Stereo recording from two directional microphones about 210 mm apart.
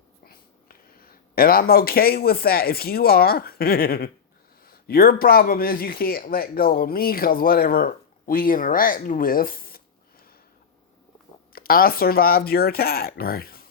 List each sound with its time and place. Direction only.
0.9 s speech: 45° left (ahead or behind)
11.5 s speech: 45° left (ahead or behind)